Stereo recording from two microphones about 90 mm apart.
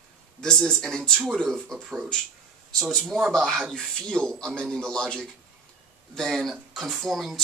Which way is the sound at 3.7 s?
5° left (ahead or behind).